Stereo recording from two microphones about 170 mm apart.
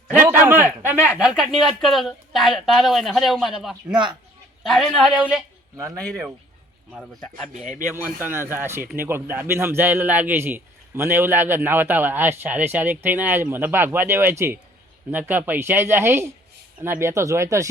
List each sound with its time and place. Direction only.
0.1 s a man's voice: 10° right (ahead or behind)
5.7 s speech: 20° right (ahead or behind)
6.9 s a man's voice: centre (ahead or behind)
7.5 s speech: 50° right (ahead or behind)
8.3 s a man's voice: 15° right (ahead or behind)